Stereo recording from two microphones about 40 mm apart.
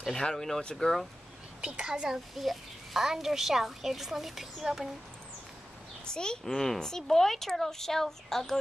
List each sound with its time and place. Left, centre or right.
0.2 s speech: centre
1.6 s a woman's voice: right
2.0 s a child's voice: centre
6.0 s speech: centre